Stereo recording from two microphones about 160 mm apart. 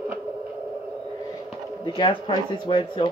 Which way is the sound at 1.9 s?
30° left (ahead or behind).